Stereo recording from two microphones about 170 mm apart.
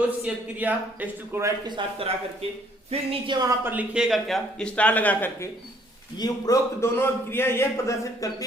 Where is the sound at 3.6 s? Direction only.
10° right (ahead or behind); by 5.5 s 10° left (ahead or behind).